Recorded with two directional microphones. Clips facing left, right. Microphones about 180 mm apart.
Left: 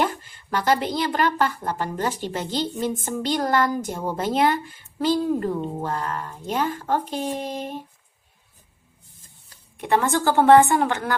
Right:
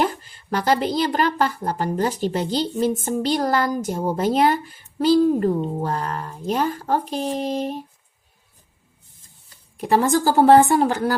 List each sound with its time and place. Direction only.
0.0 s a woman's voice: 40° right (ahead or behind)
9.8 s a woman's voice: 35° right (ahead or behind)